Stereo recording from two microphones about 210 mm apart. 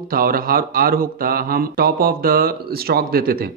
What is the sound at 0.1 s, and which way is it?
Speech, 45° right (ahead or behind).